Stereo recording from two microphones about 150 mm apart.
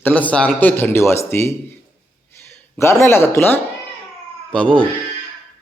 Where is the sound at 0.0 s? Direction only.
10° left (ahead or behind).